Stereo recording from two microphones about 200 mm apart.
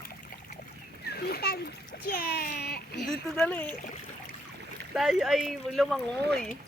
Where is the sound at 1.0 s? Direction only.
50° left (ahead or behind).